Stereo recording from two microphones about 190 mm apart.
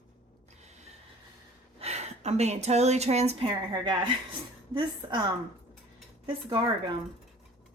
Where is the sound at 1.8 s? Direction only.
35° right (ahead or behind).